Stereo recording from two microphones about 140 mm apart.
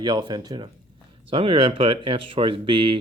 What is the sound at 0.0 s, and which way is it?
Speech, 30° right (ahead or behind).